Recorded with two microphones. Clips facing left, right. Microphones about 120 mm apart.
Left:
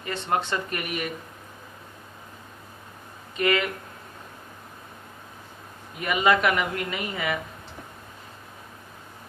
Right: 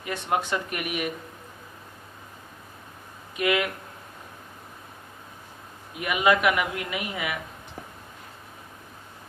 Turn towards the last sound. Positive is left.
turn(degrees=-10)  # may be behind; listen again after turning